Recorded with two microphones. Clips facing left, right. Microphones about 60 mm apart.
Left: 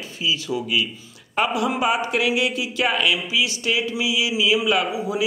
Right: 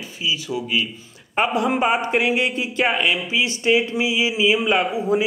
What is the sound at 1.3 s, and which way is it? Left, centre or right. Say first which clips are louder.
A man's voice: right 2 dB; right.